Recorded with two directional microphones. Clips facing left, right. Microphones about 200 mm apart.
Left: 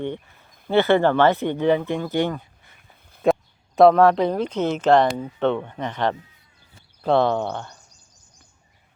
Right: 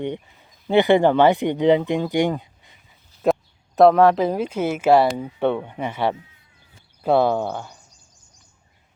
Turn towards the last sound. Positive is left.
turn(degrees=-5)  # may be behind; listen again after turning